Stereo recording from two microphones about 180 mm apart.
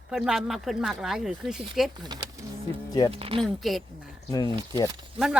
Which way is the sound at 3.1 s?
30° right (ahead or behind).